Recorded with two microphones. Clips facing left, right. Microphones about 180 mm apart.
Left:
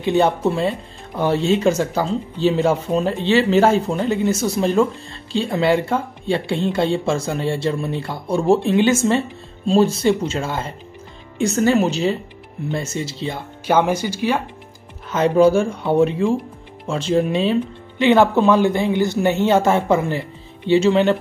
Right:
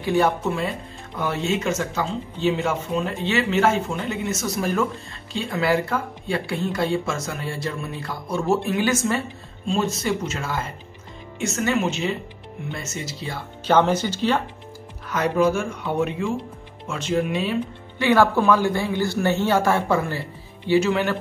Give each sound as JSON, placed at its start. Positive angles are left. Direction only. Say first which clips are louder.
{"t": 0.0, "sound": "speech", "louder": "left 4 dB", "side_deg": 25}
{"t": 13.7, "sound": "speech", "louder": "left 1 dB", "side_deg": 10}
{"t": 15.0, "sound": "speech", "louder": "left 6 dB", "side_deg": 25}